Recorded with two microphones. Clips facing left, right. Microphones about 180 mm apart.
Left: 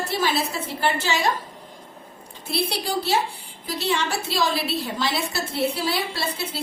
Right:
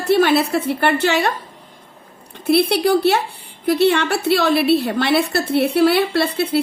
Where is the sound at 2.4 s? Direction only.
60° right (ahead or behind).